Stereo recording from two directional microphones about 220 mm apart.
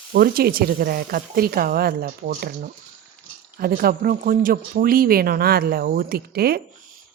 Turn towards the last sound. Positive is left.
turn(degrees=-45)  # may be behind; listen again after turning